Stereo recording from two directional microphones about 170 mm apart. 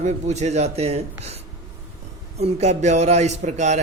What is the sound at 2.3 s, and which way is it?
Speech, 40° right (ahead or behind).